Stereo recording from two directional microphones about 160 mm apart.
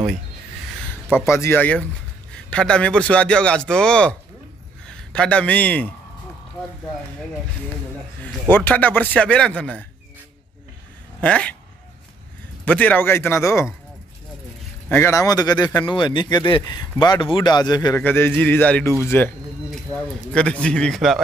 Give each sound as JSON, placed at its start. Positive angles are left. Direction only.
{"t": 1.3, "sound": "a man's voice", "side_deg": 15}
{"t": 8.2, "sound": "a man's voice", "side_deg": 10}
{"t": 11.1, "sound": "speech", "side_deg": 10}
{"t": 12.6, "sound": "a man's voice", "side_deg": 10}
{"t": 14.9, "sound": "speech", "side_deg": 15}
{"t": 17.9, "sound": "a man's voice", "side_deg": 15}